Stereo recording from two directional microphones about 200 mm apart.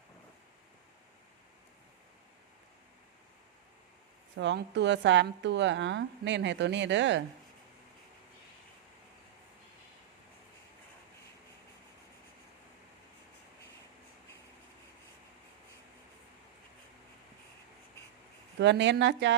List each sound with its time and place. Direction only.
4.4 s a woman's voice: 60° right (ahead or behind)
18.6 s a woman's voice: 60° right (ahead or behind)